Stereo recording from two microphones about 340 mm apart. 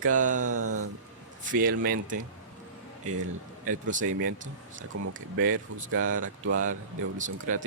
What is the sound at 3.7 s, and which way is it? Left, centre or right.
Speech, right.